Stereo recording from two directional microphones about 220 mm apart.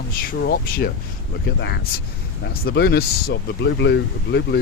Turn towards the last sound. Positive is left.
turn(degrees=50)  # may be behind; listen again after turning